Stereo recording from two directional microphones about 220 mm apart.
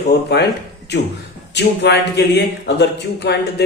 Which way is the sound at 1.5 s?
50° left (ahead or behind).